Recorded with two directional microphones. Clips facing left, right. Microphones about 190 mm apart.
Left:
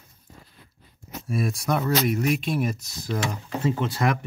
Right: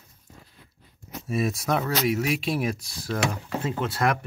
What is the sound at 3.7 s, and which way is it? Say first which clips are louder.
Speech: left 1 dB; centre (ahead or behind).